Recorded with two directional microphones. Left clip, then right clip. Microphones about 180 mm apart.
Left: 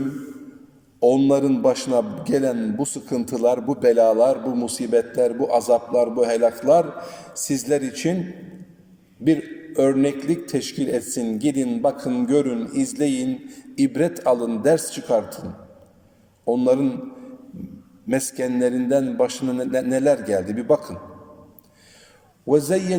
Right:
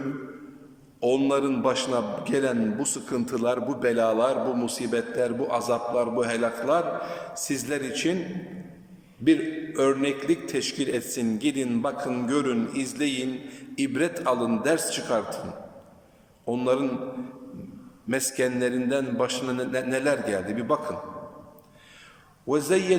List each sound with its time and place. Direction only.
0.9 s a man's voice: 30° left (ahead or behind)
9.2 s a man's voice: 30° left (ahead or behind)
16.5 s a man's voice: 30° left (ahead or behind)
18.1 s a man's voice: 30° left (ahead or behind)
22.4 s a man's voice: 30° left (ahead or behind)